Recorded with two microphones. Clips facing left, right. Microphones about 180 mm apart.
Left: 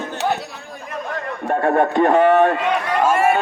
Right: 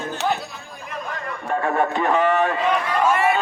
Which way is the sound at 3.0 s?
45° left (ahead or behind).